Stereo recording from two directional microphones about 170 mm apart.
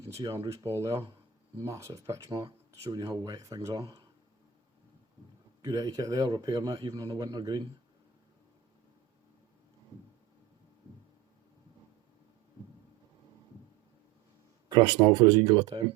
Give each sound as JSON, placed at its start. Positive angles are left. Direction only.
{"t": 0.2, "sound": "a man's voice", "side_deg": -20}
{"t": 5.6, "sound": "a man's voice", "side_deg": -20}
{"t": 14.8, "sound": "a man's voice", "side_deg": -25}